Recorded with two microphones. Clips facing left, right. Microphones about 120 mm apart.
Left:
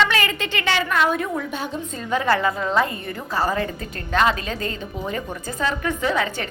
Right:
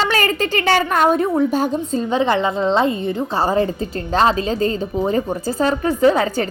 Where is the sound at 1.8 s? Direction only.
25° right (ahead or behind).